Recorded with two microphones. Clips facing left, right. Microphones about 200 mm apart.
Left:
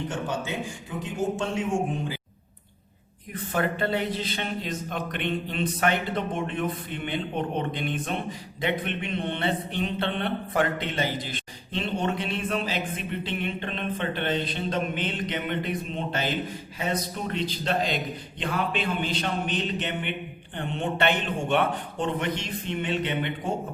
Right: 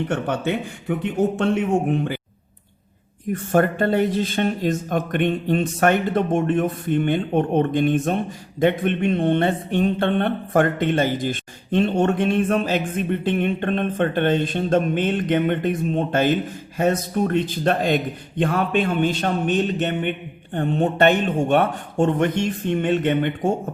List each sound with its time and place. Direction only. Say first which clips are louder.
0.1 s a man's voice: right 7 dB; 60° right (ahead or behind)
3.3 s speech: right 8 dB; 45° right (ahead or behind)